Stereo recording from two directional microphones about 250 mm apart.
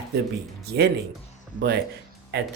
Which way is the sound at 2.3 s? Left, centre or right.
Right.